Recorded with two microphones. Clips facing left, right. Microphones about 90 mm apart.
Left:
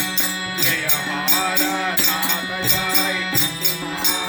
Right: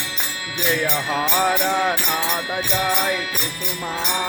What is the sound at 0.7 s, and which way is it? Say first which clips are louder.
Music: right 3 dB; 30° right (ahead or behind).